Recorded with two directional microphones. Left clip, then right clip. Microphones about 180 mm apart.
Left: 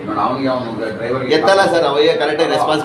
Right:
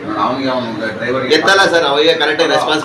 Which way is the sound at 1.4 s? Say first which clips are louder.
Right 1 dB; 70° left (ahead or behind).